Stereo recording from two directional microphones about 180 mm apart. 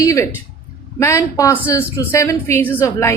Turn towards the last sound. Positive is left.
turn(degrees=15)  # may be behind; listen again after turning